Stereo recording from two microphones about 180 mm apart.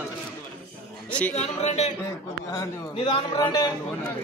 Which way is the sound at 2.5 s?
25° left (ahead or behind).